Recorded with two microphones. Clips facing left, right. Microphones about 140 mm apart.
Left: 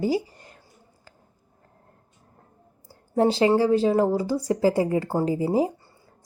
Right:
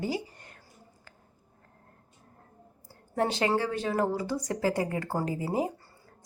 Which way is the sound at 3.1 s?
30° left (ahead or behind).